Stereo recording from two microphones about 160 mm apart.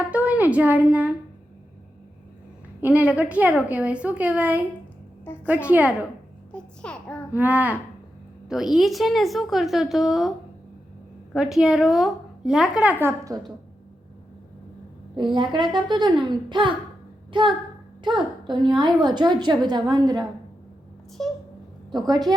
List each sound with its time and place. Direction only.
0.1 s a woman's voice: 10° right (ahead or behind)
2.8 s a woman's voice: 10° right (ahead or behind)
5.6 s a woman's voice: 10° right (ahead or behind)
6.5 s a child's voice: 5° left (ahead or behind)
7.3 s a woman's voice: 10° right (ahead or behind)
11.3 s a woman's voice: centre (ahead or behind); by 13.4 s 20° right (ahead or behind)
15.1 s a woman's voice: 30° right (ahead or behind)
18.0 s a child's voice: 30° right (ahead or behind)
21.2 s a woman's voice: 5° left (ahead or behind)
21.9 s a woman's voice: 25° right (ahead or behind)